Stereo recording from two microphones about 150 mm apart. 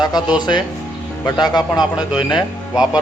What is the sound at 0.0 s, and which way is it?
A man's voice, 30° left (ahead or behind).